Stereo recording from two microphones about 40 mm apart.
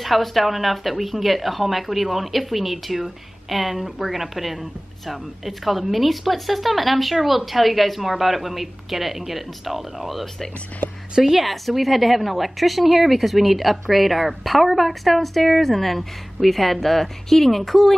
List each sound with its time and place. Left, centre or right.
0.0 s a woman's voice: centre
10.8 s a sound: left
11.1 s a woman's voice: centre